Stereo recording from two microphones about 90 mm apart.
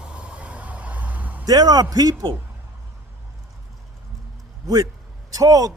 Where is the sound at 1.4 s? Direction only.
45° right (ahead or behind).